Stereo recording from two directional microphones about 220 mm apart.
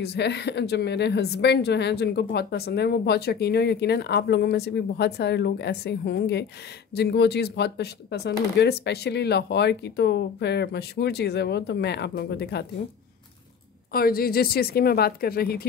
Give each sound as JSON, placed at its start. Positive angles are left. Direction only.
{"t": 0.0, "sound": "a woman's voice", "side_deg": 50}
{"t": 13.9, "sound": "a woman's voice", "side_deg": 45}